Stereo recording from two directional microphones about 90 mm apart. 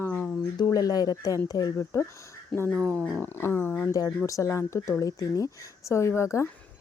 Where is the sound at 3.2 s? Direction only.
25° left (ahead or behind).